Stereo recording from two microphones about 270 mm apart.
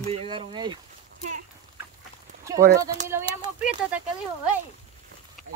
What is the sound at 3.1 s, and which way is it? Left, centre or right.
Speech, centre.